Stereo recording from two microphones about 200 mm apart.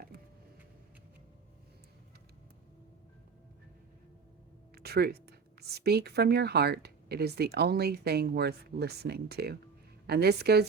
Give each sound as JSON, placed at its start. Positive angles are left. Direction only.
{"t": 4.7, "sound": "a woman's voice", "side_deg": -50}